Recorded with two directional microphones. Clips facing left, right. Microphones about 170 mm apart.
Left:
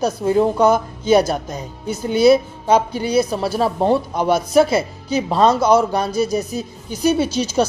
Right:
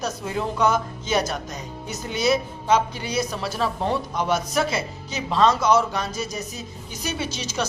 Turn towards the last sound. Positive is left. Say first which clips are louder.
# left 10 dB
turn(degrees=30)  # may be behind; listen again after turning